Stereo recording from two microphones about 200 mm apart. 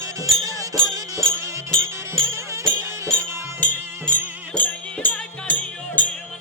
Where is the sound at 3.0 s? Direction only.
5° left (ahead or behind).